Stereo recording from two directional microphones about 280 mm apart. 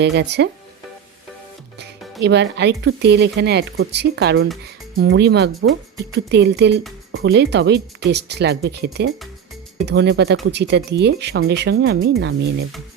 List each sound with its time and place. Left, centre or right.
0.0 s speech: right
2.2 s speech: right